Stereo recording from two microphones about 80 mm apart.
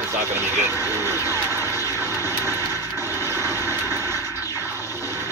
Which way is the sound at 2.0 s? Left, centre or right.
Right.